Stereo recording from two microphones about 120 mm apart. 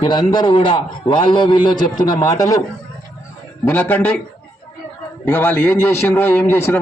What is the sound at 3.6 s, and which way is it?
Speech, 15° left (ahead or behind).